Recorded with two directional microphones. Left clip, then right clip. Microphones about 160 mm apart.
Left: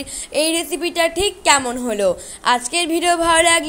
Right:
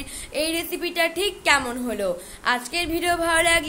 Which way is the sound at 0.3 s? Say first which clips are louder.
Left 6 dB; 35° left (ahead or behind).